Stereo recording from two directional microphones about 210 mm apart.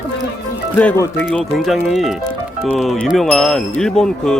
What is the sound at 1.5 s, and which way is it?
Speech, centre (ahead or behind).